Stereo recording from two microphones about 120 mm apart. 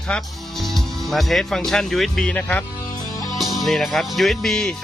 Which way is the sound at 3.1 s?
30° left (ahead or behind).